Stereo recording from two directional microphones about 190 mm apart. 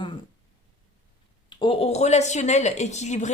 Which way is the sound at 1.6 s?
30° left (ahead or behind).